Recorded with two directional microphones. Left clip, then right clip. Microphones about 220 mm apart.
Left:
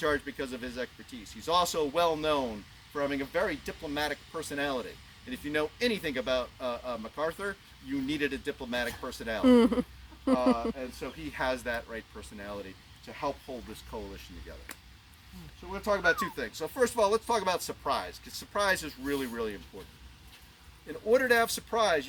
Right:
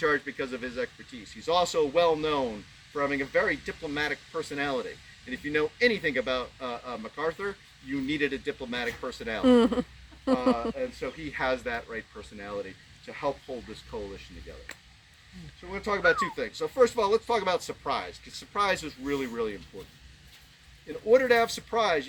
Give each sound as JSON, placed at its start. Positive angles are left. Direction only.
{"t": 0.0, "sound": "speech", "side_deg": 25}
{"t": 9.4, "sound": "speech", "side_deg": 15}
{"t": 10.8, "sound": "speech", "side_deg": 25}
{"t": 13.9, "sound": "speech", "side_deg": 25}
{"t": 15.7, "sound": "speech", "side_deg": 25}
{"t": 21.1, "sound": "speech", "side_deg": 25}